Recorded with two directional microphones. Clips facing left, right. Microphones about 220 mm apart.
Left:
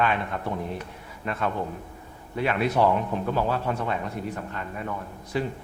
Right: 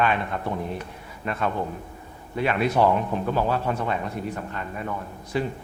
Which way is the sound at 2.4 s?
20° right (ahead or behind).